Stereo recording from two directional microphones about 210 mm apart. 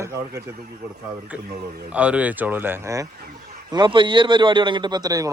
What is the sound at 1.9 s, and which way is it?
A man's voice, 5° right (ahead or behind).